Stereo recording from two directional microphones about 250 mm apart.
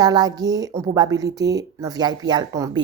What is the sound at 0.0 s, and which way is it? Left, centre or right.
A woman's voice, centre.